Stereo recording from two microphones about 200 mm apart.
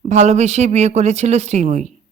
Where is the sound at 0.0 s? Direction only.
35° right (ahead or behind).